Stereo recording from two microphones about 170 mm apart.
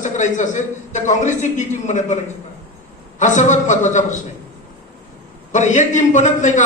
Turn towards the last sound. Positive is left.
turn(degrees=45)  # may be behind; listen again after turning